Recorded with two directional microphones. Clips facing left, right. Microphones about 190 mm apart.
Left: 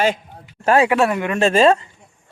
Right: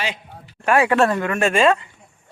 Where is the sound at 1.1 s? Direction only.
20° left (ahead or behind).